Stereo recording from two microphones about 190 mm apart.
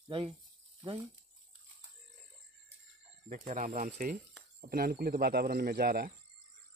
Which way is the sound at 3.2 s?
45° right (ahead or behind).